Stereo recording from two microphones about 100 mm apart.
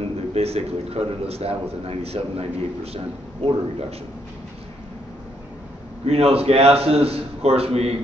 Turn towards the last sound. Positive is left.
turn(degrees=-90)